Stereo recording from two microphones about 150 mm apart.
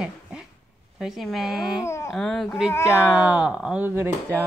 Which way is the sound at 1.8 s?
20° left (ahead or behind).